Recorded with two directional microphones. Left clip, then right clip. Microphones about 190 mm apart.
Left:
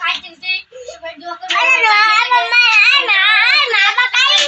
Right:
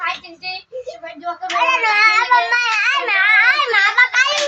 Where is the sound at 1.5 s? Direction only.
25° left (ahead or behind).